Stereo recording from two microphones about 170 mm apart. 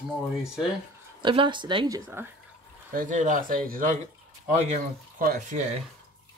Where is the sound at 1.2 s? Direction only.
30° right (ahead or behind).